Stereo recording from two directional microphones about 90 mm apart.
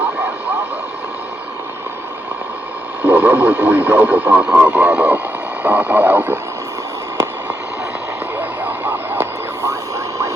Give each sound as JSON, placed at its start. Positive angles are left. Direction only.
{"t": 3.0, "sound": "speech", "side_deg": -20}
{"t": 8.4, "sound": "a sound", "side_deg": -20}
{"t": 9.6, "sound": "radio", "side_deg": -35}